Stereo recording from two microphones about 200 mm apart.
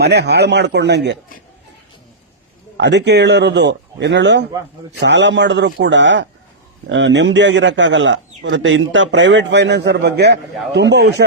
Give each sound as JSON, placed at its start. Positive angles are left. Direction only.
{"t": 0.0, "sound": "a man's voice", "side_deg": -55}
{"t": 2.7, "sound": "a man's voice", "side_deg": -60}